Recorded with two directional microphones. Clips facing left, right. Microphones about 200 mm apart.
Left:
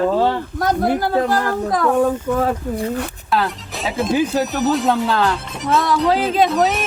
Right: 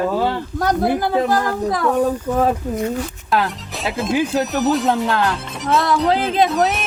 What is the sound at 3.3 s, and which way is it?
Speech, centre (ahead or behind).